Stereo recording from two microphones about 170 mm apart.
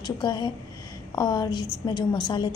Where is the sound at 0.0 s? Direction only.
25° left (ahead or behind).